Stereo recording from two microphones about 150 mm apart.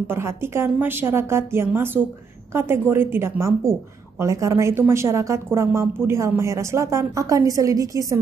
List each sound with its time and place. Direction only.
0.0 s a woman's voice: 15° right (ahead or behind)